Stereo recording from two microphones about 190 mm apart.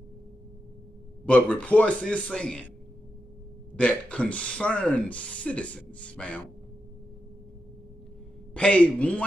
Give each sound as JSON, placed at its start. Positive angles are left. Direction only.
{"t": 1.2, "sound": "speech", "side_deg": 5}
{"t": 3.7, "sound": "speech", "side_deg": 5}
{"t": 8.5, "sound": "speech", "side_deg": 5}